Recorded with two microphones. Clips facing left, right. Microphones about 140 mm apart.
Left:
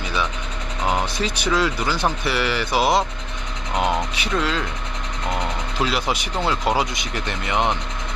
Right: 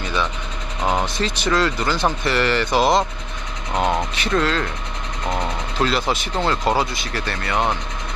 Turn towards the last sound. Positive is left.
turn(degrees=20)  # may be behind; listen again after turning